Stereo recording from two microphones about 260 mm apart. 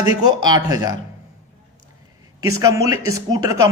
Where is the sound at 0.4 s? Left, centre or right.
Centre.